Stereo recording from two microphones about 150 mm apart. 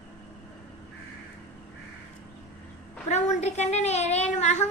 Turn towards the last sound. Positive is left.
turn(degrees=50)  # may be behind; listen again after turning